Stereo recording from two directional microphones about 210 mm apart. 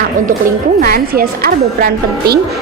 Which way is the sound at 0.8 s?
45° right (ahead or behind).